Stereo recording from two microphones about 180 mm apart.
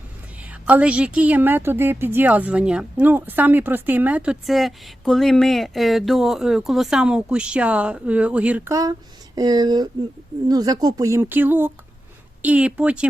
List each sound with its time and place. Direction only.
0.6 s a woman's voice: 5° right (ahead or behind)